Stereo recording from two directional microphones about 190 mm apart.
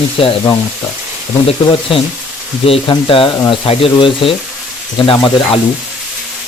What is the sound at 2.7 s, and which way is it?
Speech, 30° left (ahead or behind).